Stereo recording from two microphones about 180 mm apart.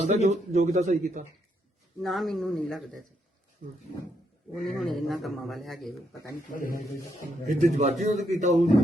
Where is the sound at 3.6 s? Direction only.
55° right (ahead or behind).